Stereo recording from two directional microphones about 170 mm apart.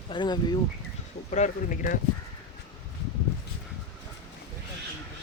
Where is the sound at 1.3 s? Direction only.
50° left (ahead or behind).